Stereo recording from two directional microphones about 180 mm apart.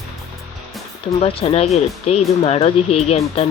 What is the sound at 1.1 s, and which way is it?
Speech, 35° left (ahead or behind).